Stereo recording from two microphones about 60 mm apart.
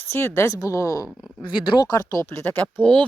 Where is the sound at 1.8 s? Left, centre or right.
Left.